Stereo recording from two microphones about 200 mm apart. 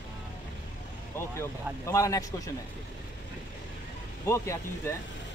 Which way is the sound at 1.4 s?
15° left (ahead or behind).